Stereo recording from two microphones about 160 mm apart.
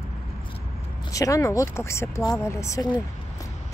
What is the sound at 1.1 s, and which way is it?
Speech, 20° left (ahead or behind).